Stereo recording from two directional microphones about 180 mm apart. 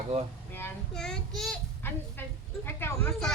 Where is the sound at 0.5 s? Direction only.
5° left (ahead or behind).